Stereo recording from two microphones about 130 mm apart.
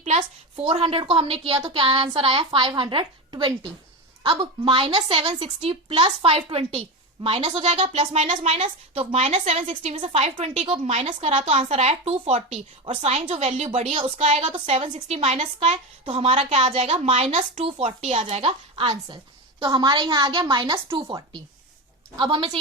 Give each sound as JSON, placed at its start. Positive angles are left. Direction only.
{"t": 0.0, "sound": "a woman's voice", "side_deg": -55}
{"t": 16.0, "sound": "a woman's voice", "side_deg": -45}
{"t": 22.2, "sound": "a woman's voice", "side_deg": -40}